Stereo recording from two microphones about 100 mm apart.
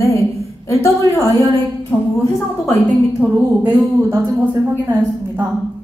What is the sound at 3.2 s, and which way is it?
Speech, 5° right (ahead or behind).